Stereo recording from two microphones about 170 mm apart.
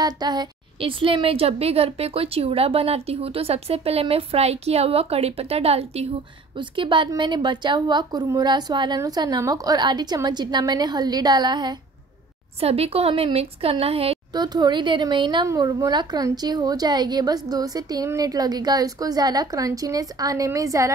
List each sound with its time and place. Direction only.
0.0 s a woman's voice: 25° right (ahead or behind)
12.5 s a woman's voice: 35° right (ahead or behind)
14.3 s speech: 25° right (ahead or behind)